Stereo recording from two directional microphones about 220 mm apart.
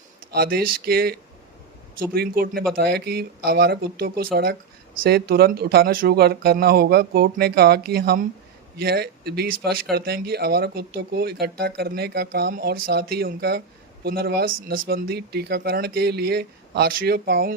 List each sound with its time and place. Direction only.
0.3 s speech: 45° right (ahead or behind)